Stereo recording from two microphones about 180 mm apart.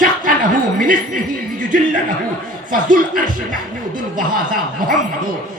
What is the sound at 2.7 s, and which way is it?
Speech, 50° right (ahead or behind).